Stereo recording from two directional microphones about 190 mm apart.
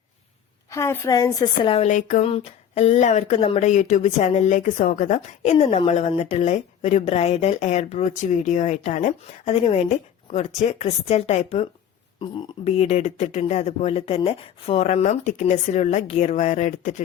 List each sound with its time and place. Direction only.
0.7 s a woman's voice: 15° left (ahead or behind)
1.7 s speech: 35° left (ahead or behind)